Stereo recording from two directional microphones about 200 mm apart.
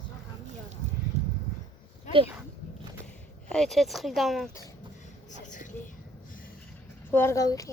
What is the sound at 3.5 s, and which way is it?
Speech, centre (ahead or behind).